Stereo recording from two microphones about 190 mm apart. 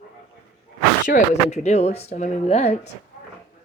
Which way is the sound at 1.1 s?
35° left (ahead or behind).